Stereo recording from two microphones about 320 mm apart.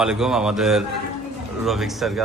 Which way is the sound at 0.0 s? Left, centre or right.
Centre.